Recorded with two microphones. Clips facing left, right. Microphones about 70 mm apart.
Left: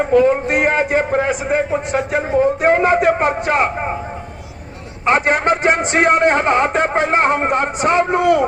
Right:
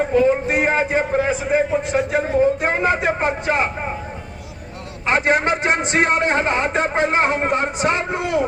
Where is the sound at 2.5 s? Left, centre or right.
Left.